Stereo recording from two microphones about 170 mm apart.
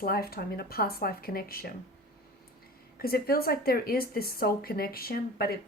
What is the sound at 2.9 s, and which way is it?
Speech, 60° left (ahead or behind).